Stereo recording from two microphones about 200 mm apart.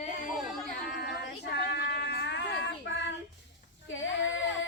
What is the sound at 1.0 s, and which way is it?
Child singing, 55° left (ahead or behind).